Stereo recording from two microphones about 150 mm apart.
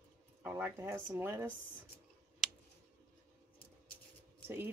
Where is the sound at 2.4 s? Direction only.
5° left (ahead or behind).